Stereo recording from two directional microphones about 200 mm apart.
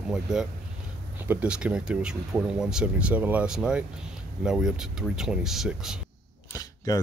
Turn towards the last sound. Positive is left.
turn(degrees=15)  # may be behind; listen again after turning